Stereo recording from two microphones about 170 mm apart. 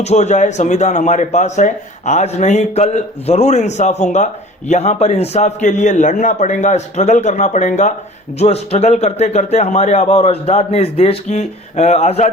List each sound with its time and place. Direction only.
0.0 s a man's voice: 40° left (ahead or behind)